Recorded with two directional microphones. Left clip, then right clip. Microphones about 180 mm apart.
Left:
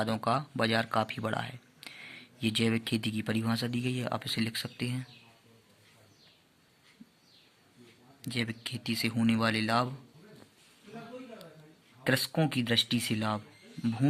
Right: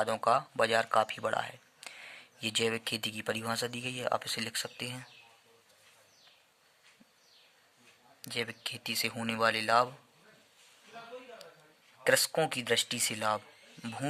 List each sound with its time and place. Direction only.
0.0 s speech: 20° right (ahead or behind)
8.2 s speech: 25° right (ahead or behind)
12.0 s speech: 20° right (ahead or behind)